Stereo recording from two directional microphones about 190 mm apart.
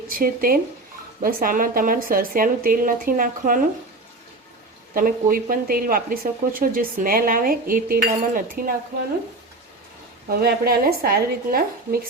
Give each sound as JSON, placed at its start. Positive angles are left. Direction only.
{"t": 0.1, "sound": "speech", "side_deg": -50}
{"t": 4.9, "sound": "speech", "side_deg": -50}
{"t": 10.4, "sound": "speech", "side_deg": -50}